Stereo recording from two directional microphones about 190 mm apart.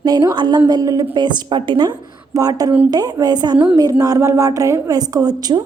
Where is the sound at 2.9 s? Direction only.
20° right (ahead or behind).